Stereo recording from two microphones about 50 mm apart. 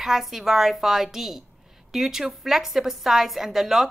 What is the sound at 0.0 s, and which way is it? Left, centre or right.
A woman's voice, centre.